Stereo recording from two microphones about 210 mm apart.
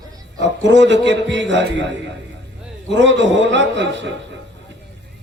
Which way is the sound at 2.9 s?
60° right (ahead or behind).